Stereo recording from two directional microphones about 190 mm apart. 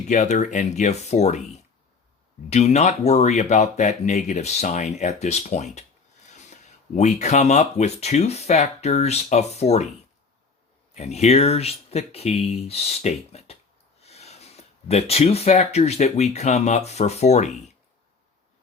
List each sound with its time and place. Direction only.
0.1 s speech: 40° left (ahead or behind)
10.9 s speech: 35° left (ahead or behind)